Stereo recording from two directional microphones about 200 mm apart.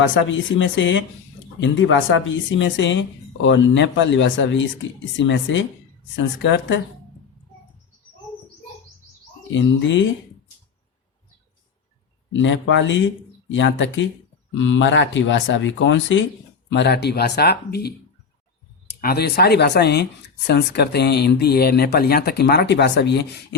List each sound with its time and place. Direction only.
0.0 s speech: 70° left (ahead or behind)
9.6 s speech: 65° left (ahead or behind)
12.3 s speech: 65° left (ahead or behind)
19.0 s speech: 50° left (ahead or behind)